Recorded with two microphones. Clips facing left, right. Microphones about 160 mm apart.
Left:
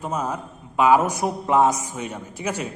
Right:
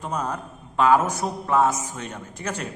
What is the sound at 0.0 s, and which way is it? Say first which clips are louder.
A man's voice: left 2 dB; 5° left (ahead or behind).